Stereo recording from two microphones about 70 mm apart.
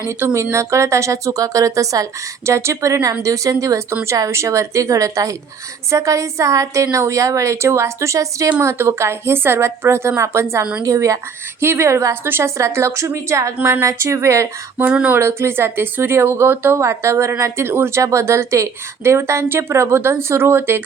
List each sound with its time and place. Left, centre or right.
0.2 s speech: right
0.5 s a woman's voice: right
2.5 s a woman's voice: right
11.6 s speech: right
13.6 s speech: right
13.8 s a woman's voice: right
18.0 s speech: right